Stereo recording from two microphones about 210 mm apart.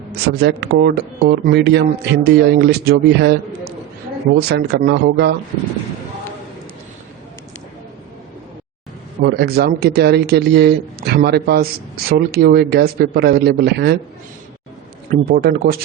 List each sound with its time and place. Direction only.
0.1 s speech: 50° right (ahead or behind)
4.4 s speech: 50° right (ahead or behind)
9.2 s speech: 50° right (ahead or behind)
15.1 s speech: 45° right (ahead or behind)